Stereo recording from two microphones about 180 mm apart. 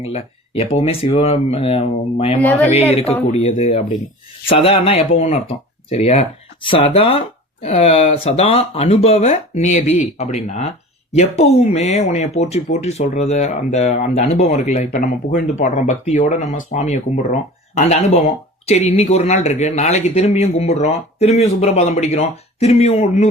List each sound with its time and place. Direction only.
0.0 s speech: 35° left (ahead or behind)